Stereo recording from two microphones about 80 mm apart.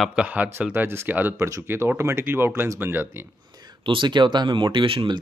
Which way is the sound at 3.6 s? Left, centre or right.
Right.